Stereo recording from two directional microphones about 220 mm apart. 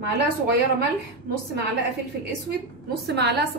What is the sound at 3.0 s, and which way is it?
Speech, 45° right (ahead or behind).